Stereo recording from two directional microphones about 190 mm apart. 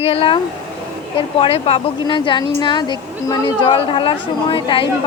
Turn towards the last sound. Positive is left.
turn(degrees=25)  # may be behind; listen again after turning